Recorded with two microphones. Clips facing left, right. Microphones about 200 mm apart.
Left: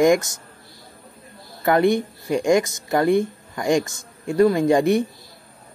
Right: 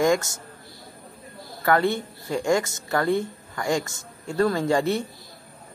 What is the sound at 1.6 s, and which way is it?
Speech, 20° left (ahead or behind).